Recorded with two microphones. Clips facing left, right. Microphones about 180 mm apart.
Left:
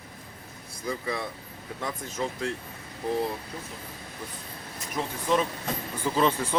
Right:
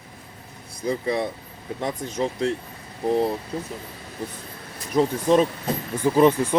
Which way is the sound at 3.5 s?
35° right (ahead or behind).